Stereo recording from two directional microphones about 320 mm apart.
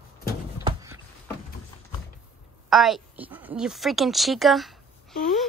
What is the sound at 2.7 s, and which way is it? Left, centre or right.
A woman's voice, centre.